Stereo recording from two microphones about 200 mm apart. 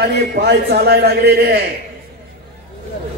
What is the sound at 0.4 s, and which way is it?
A man's voice, 55° right (ahead or behind).